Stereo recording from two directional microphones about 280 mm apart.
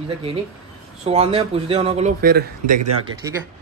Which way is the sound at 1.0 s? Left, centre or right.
Right.